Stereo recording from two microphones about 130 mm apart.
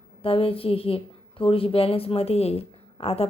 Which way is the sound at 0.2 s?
45° left (ahead or behind).